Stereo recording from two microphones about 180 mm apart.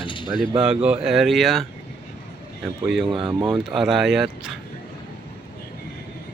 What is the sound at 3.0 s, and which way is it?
Speech, 30° right (ahead or behind).